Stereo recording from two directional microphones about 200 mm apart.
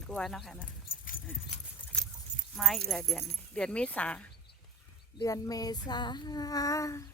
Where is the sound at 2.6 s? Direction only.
Centre (ahead or behind).